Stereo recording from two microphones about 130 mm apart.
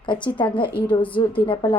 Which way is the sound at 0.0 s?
40° left (ahead or behind).